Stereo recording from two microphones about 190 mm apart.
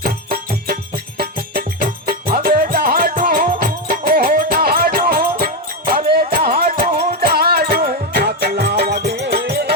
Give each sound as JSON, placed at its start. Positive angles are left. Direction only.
{"t": 0.0, "sound": "music", "side_deg": -55}